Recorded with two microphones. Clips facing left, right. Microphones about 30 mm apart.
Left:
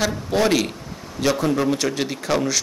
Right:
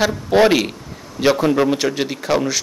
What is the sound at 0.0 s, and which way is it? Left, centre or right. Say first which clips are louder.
A man's voice: right 6 dB; centre.